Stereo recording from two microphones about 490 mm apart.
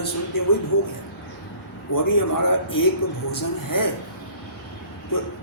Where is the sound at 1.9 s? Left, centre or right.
Left.